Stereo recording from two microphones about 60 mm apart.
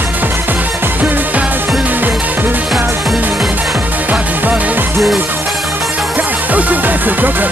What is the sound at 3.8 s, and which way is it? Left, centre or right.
Music, right.